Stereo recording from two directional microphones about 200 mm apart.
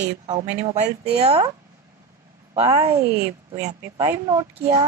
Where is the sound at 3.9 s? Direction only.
15° right (ahead or behind).